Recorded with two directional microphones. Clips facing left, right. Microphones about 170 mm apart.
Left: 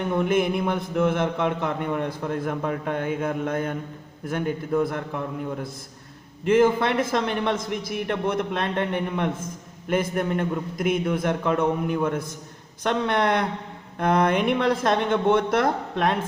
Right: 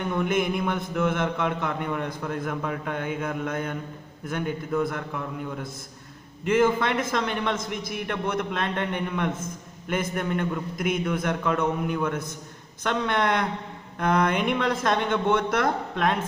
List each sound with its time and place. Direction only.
0.1 s a man's voice: 30° left (ahead or behind)